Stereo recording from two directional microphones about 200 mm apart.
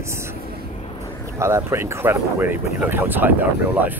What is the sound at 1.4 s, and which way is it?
Speech, 15° right (ahead or behind).